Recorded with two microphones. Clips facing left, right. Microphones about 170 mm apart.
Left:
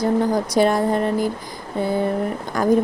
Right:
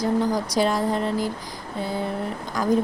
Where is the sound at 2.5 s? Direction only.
55° left (ahead or behind).